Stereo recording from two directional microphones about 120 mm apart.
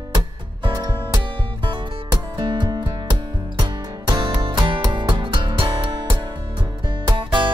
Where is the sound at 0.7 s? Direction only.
35° right (ahead or behind).